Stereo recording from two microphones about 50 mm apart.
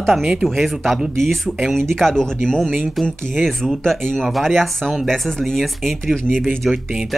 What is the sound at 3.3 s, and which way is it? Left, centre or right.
Speech, centre.